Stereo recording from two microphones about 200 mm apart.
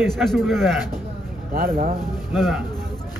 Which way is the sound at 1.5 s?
45° right (ahead or behind).